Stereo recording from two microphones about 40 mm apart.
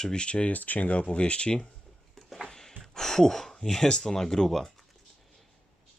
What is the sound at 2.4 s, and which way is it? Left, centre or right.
Speech, centre.